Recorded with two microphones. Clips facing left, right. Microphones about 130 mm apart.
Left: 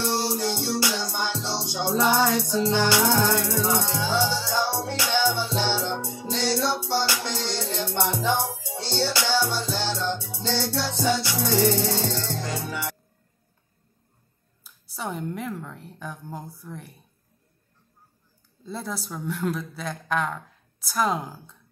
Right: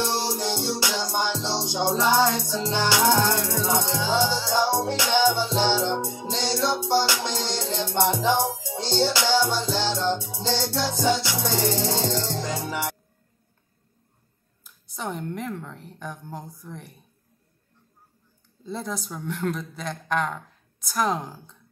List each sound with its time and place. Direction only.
0.0 s music: 20° right (ahead or behind)
14.6 s a woman's voice: 5° left (ahead or behind)
18.7 s a woman's voice: centre (ahead or behind)